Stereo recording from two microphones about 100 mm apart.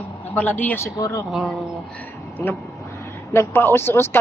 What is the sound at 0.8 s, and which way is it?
Speech, 35° left (ahead or behind).